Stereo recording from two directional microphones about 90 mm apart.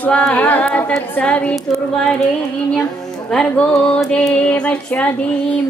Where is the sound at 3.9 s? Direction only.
10° left (ahead or behind).